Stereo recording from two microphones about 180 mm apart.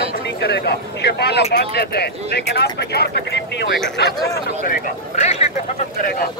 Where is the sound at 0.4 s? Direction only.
65° left (ahead or behind).